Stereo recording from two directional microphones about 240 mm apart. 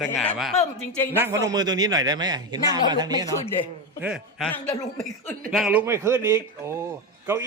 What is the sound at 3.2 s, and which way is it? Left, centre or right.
Speech, centre.